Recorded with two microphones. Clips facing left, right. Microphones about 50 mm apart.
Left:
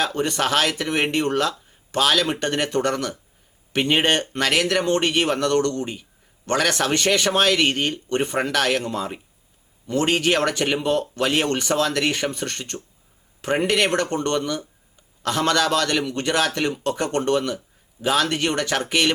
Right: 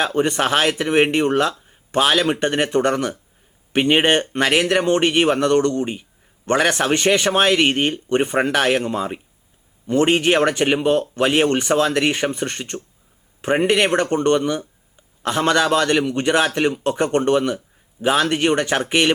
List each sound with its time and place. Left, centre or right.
0.0 s speech: right